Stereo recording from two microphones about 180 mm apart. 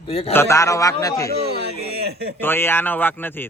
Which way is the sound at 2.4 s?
10° left (ahead or behind).